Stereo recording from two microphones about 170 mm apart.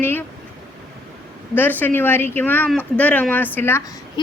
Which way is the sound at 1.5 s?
10° left (ahead or behind).